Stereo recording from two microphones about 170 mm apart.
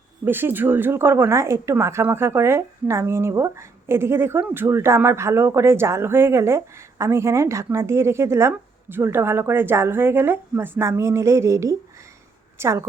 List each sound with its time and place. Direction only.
0.3 s a woman's voice: 10° right (ahead or behind)